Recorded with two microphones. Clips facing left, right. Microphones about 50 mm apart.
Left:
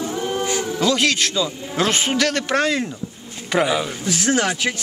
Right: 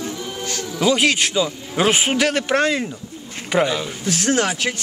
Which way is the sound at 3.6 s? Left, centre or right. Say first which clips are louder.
Left 1 dB; centre.